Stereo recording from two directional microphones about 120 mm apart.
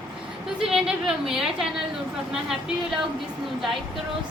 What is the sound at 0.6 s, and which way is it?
A woman's voice, 5° right (ahead or behind).